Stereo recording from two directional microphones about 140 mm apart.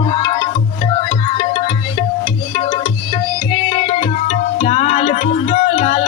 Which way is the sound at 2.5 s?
40° left (ahead or behind).